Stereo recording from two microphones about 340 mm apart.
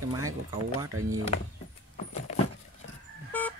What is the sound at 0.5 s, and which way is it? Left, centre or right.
Speech, centre.